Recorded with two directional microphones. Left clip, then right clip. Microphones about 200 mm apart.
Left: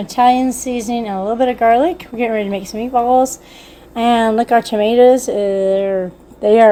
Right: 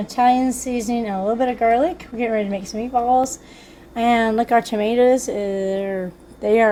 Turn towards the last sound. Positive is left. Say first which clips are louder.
# left 6 dB
turn(degrees=5)  # may be behind; listen again after turning